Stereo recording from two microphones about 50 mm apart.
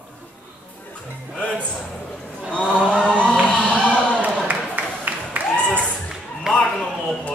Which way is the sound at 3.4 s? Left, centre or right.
Left.